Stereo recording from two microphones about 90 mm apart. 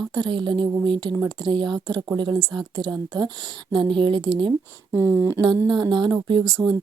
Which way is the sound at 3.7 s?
70° right (ahead or behind).